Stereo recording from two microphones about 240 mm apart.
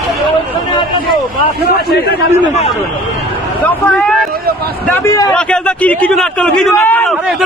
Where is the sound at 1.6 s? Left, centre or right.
Left.